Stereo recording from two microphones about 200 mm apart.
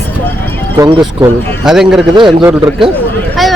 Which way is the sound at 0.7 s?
25° right (ahead or behind).